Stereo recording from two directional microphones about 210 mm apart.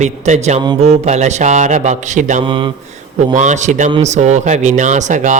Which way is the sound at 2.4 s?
25° right (ahead or behind).